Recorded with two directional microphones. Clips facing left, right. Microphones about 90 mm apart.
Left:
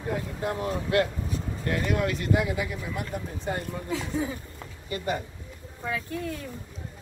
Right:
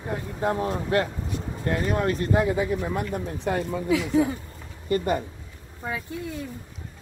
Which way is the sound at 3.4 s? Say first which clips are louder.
Right 8 dB; 85° right.